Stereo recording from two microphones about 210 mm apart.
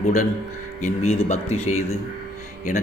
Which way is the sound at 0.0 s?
35° left (ahead or behind).